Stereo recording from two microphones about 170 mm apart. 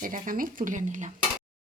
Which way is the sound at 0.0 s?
50° right (ahead or behind).